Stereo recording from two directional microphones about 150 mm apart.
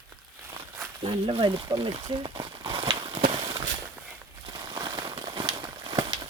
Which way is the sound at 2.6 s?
35° right (ahead or behind).